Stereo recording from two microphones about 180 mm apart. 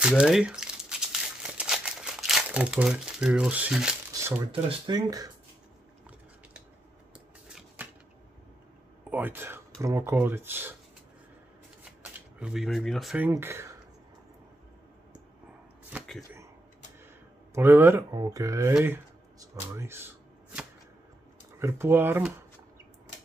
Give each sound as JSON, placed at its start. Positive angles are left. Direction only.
{"t": 0.1, "sound": "crumpling", "side_deg": -5}
{"t": 4.1, "sound": "a sound", "side_deg": -15}
{"t": 4.5, "sound": "speech", "side_deg": -25}
{"t": 7.4, "sound": "a sound", "side_deg": -5}
{"t": 9.1, "sound": "speech", "side_deg": -10}
{"t": 12.0, "sound": "speech", "side_deg": -5}
{"t": 13.3, "sound": "speech", "side_deg": -15}
{"t": 17.6, "sound": "speech", "side_deg": -10}
{"t": 21.5, "sound": "speech", "side_deg": -15}